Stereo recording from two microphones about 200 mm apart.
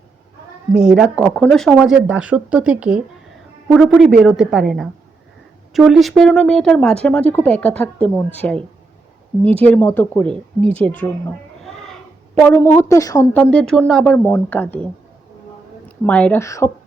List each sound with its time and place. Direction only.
0.7 s a woman's voice: 5° right (ahead or behind)
16.0 s speech: 5° left (ahead or behind)